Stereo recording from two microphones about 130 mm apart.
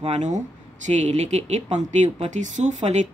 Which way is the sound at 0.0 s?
65° right (ahead or behind).